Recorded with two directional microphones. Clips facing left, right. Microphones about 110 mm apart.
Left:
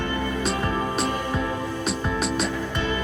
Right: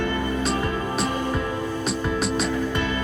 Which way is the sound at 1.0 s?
Centre (ahead or behind).